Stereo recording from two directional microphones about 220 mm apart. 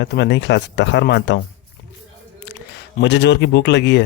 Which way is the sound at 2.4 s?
50° left (ahead or behind).